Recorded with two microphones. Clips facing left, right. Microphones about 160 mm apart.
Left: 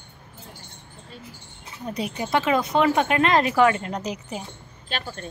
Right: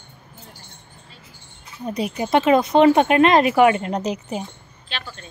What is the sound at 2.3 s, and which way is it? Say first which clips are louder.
Speech: right 6 dB; 25° right (ahead or behind).